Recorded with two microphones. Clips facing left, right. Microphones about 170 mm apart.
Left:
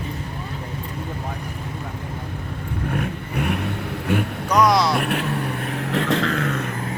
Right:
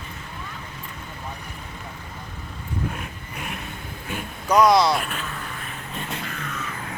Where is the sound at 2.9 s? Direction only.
60° left (ahead or behind).